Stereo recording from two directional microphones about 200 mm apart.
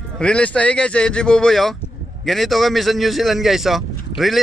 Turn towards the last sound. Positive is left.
turn(degrees=0)  # may be behind; listen again after turning